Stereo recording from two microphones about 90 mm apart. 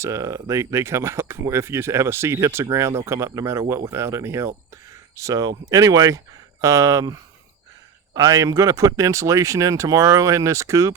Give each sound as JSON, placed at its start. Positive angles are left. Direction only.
{"t": 0.0, "sound": "speech", "side_deg": -35}